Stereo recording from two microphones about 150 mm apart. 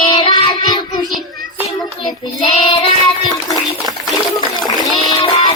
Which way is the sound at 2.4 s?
40° left (ahead or behind).